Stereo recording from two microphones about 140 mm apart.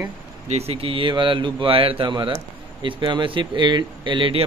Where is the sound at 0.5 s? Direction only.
45° right (ahead or behind).